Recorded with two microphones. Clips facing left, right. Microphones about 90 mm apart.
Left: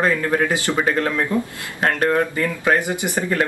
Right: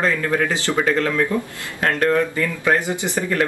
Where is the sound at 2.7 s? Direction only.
15° left (ahead or behind).